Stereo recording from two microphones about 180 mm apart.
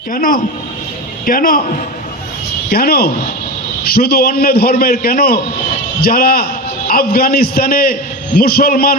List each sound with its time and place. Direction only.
0.1 s a man's voice: 50° left (ahead or behind)
2.6 s a man's voice: 55° left (ahead or behind)